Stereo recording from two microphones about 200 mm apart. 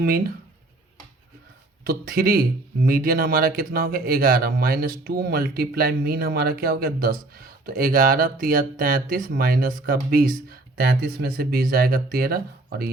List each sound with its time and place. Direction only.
0.0 s speech: 45° right (ahead or behind)
1.8 s speech: 45° right (ahead or behind)